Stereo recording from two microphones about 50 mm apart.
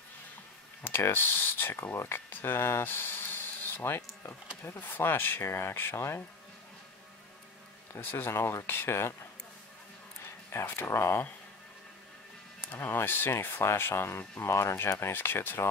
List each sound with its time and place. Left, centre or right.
0.8 s speech: left
8.0 s speech: left
10.5 s speech: left
12.5 s speech: left
14.4 s speech: left